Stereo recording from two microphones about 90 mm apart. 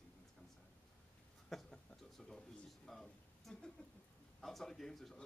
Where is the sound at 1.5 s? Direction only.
5° left (ahead or behind).